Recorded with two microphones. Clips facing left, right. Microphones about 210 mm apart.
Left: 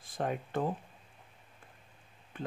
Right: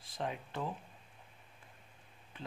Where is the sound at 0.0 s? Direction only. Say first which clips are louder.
Left 5 dB; 50° left (ahead or behind).